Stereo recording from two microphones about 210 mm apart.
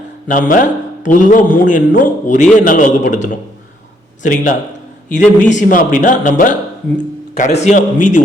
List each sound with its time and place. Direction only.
0.3 s a man's voice: 40° left (ahead or behind)
7.6 s a man's voice: 35° left (ahead or behind)